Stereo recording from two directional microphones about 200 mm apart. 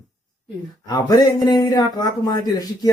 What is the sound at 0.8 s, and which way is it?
Speech, 20° left (ahead or behind).